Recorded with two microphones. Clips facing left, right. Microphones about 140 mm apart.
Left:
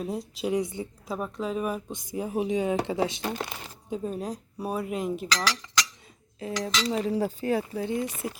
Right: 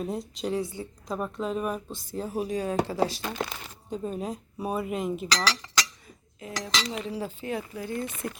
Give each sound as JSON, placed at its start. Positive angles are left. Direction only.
{"t": 0.0, "sound": "speech", "side_deg": 0}
{"t": 0.5, "sound": "speech", "side_deg": 20}
{"t": 1.0, "sound": "speech", "side_deg": 0}
{"t": 1.9, "sound": "speech", "side_deg": 15}
{"t": 3.5, "sound": "speech", "side_deg": 10}
{"t": 5.5, "sound": "speech", "side_deg": -35}
{"t": 6.4, "sound": "speech", "side_deg": 35}
{"t": 7.9, "sound": "speech", "side_deg": 15}